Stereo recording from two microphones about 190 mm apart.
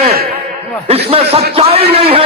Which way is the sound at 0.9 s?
30° right (ahead or behind).